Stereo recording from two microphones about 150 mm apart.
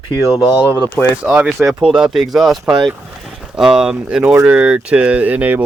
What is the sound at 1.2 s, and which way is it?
Speech, 10° right (ahead or behind).